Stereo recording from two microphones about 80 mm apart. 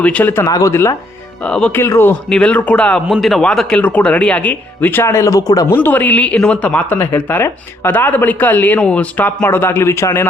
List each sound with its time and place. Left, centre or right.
0.0 s speech: centre
0.4 s a man's voice: left
0.7 s speech: left
1.5 s speech: centre
1.7 s speech: left
2.3 s speech: centre
3.1 s a man's voice: centre
3.8 s speech: left
5.0 s a man's voice: left
5.6 s speech: left